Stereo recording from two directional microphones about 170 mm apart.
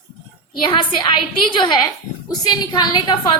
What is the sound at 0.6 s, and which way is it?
A woman's voice, 30° left (ahead or behind).